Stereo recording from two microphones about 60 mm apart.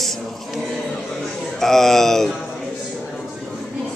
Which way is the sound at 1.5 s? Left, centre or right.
Centre.